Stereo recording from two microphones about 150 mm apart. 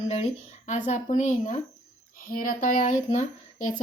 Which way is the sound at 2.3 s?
65° left (ahead or behind).